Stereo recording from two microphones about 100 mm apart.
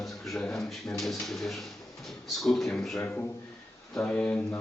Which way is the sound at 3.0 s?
15° left (ahead or behind).